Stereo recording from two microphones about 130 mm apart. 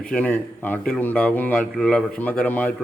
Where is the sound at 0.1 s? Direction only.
10° left (ahead or behind).